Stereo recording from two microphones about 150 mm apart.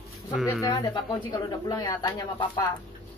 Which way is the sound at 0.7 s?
30° left (ahead or behind).